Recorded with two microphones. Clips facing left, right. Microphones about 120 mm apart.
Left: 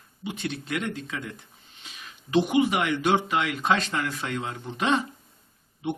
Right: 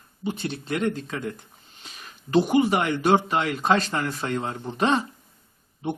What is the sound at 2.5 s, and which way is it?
Speech, 35° right (ahead or behind).